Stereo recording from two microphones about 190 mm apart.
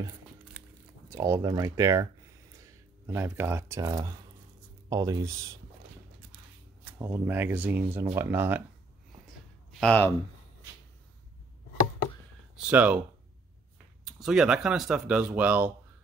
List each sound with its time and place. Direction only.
1.1 s speech: 15° right (ahead or behind)
6.8 s speech: 20° right (ahead or behind)
9.8 s speech: 10° left (ahead or behind)
12.5 s speech: 5° right (ahead or behind)
14.0 s speech: 5° right (ahead or behind)